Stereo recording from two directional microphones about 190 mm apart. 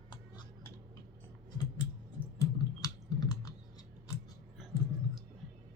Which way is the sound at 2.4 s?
20° left (ahead or behind).